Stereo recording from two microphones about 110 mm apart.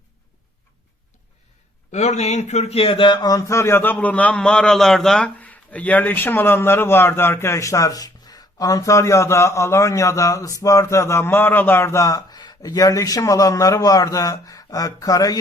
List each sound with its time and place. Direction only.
1.9 s a man's voice: 90° left; by 15.4 s 35° left (ahead or behind)